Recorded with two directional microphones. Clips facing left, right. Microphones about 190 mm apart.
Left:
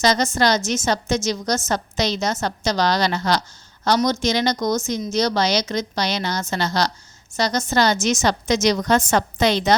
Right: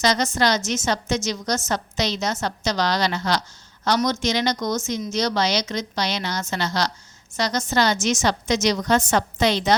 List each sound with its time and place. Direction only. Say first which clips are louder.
0.0 s a woman's voice: left 2 dB; 40° left (ahead or behind)